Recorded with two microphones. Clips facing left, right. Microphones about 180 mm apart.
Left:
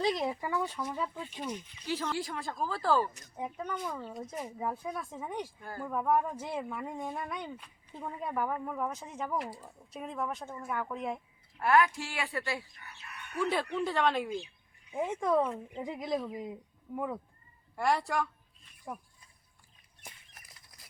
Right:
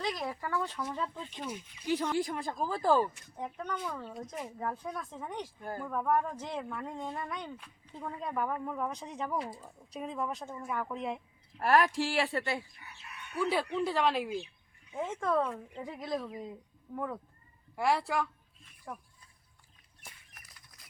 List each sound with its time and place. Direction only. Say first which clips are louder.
0.0 s speech: left 5 dB; 25° left (ahead or behind); by 1.5 s 10° left (ahead or behind)
1.5 s speech: right 4 dB; 10° right (ahead or behind)
3.3 s speech: left 2 dB; 10° left (ahead or behind)
11.6 s speech: even; 35° right (ahead or behind)
12.3 s speech: right 2 dB; 25° right (ahead or behind)
13.4 s speech: right 1 dB; 5° right (ahead or behind)
14.9 s speech: left 2 dB; 15° left (ahead or behind)
17.7 s speech: even; centre (ahead or behind)